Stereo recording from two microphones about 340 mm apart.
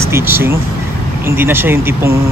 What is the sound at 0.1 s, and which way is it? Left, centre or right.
Speech, centre.